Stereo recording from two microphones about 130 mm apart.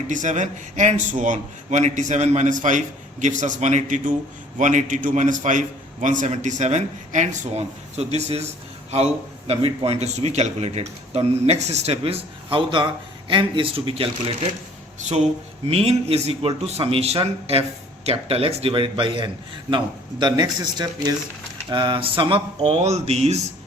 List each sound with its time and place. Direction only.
0.1 s a man's voice: 70° right (ahead or behind); by 14.3 s 45° right (ahead or behind)
15.7 s a man's voice: 50° right (ahead or behind)
22.6 s speech: 55° right (ahead or behind)